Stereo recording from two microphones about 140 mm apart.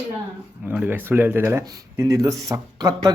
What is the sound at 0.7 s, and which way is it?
Speech, 10° right (ahead or behind).